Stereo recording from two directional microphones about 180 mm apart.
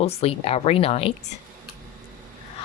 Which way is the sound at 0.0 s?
35° left (ahead or behind).